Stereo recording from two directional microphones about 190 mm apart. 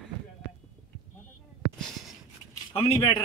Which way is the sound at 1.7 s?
5° left (ahead or behind).